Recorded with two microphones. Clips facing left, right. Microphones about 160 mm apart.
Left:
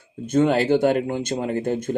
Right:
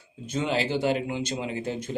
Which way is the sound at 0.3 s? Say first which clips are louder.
Left 9 dB; 50° left (ahead or behind).